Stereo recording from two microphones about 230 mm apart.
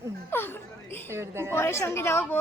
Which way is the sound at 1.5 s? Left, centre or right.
Centre.